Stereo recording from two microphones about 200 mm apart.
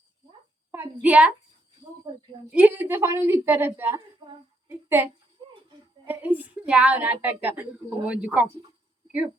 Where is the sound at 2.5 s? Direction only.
10° right (ahead or behind).